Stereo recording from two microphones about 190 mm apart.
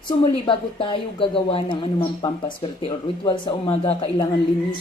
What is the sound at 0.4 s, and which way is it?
Speech, 25° left (ahead or behind).